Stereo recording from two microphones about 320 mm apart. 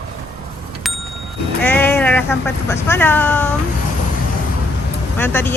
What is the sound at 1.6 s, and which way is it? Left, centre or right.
Vehicle, centre.